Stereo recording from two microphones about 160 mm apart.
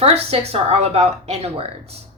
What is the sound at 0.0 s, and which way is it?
A woman's voice, 40° right (ahead or behind).